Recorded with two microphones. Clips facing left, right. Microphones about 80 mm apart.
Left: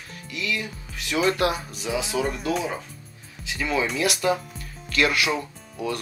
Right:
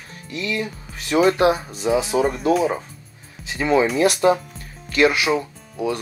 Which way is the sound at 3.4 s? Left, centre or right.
Right.